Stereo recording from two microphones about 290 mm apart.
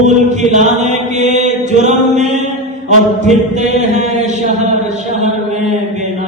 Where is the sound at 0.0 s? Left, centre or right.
Right.